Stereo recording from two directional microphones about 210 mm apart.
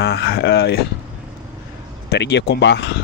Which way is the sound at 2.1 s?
55° left (ahead or behind).